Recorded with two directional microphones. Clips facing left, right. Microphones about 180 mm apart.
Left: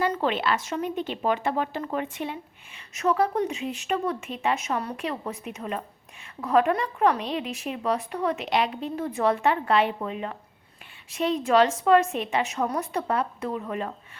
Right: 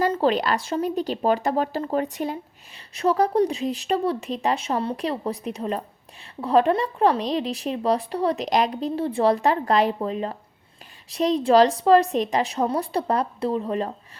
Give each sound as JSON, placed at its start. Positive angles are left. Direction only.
{"t": 0.1, "sound": "speech", "side_deg": -35}